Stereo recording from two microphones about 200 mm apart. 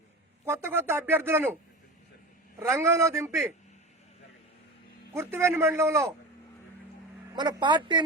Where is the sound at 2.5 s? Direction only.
10° right (ahead or behind).